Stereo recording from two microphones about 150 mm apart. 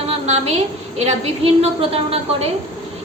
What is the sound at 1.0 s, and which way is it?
A woman's voice, 45° right (ahead or behind).